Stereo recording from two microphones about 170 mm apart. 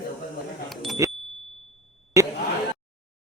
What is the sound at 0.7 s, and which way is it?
Vehicle, centre (ahead or behind).